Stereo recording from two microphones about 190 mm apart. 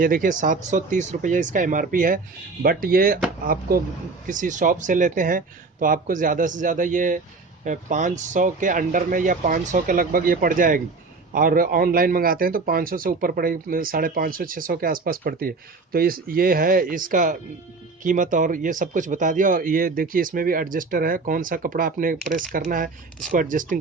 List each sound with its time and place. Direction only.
0.0 s a man's voice: 45° right (ahead or behind)